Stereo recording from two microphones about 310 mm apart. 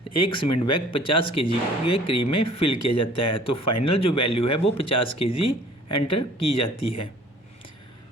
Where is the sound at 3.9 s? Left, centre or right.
Centre.